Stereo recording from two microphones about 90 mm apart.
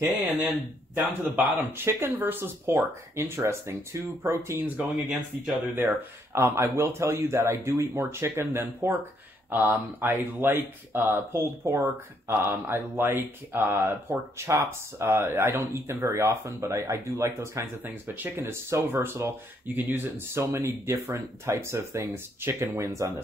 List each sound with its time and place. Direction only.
0.9 s speech: 20° right (ahead or behind)
5.8 s speech: 25° right (ahead or behind)
17.8 s speech: 20° right (ahead or behind)
20.6 s speech: 35° right (ahead or behind)